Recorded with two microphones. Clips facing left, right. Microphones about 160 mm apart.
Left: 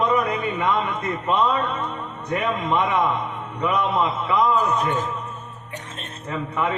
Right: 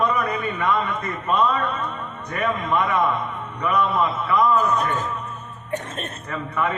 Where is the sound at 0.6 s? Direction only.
15° left (ahead or behind).